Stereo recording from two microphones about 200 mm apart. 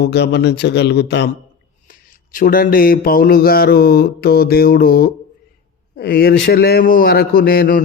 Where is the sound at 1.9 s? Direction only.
45° left (ahead or behind).